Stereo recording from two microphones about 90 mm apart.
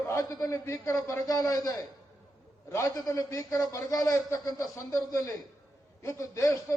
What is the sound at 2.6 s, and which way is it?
Speech, 35° left (ahead or behind).